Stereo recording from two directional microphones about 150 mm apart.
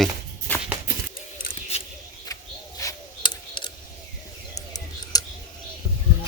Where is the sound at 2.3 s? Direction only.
20° left (ahead or behind).